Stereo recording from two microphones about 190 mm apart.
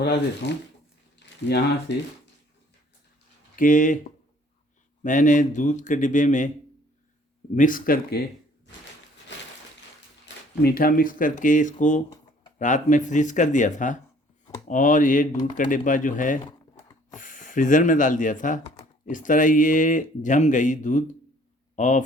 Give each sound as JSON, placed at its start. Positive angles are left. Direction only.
{"t": 0.0, "sound": "speech", "side_deg": 60}
{"t": 1.2, "sound": "a sound", "side_deg": 60}
{"t": 1.9, "sound": "speech", "side_deg": 65}
{"t": 3.5, "sound": "speech", "side_deg": 45}
{"t": 5.0, "sound": "speech", "side_deg": 40}
{"t": 7.5, "sound": "speech", "side_deg": 45}
{"t": 10.6, "sound": "speech", "side_deg": 55}